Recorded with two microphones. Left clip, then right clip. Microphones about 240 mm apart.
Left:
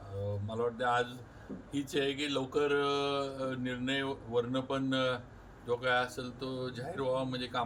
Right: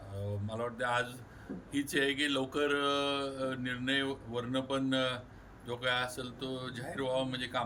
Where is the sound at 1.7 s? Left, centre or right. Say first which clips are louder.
Right 2 dB; centre.